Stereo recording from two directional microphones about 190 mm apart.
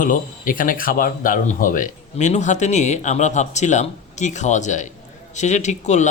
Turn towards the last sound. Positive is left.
turn(degrees=40)  # may be behind; listen again after turning